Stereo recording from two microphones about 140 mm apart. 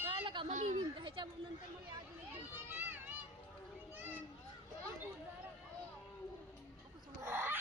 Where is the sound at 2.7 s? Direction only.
15° right (ahead or behind).